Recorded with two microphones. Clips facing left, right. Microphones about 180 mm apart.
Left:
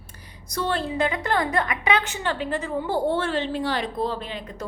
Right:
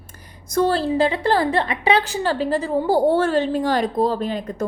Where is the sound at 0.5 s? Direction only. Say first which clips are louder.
Right 7 dB; 40° right (ahead or behind).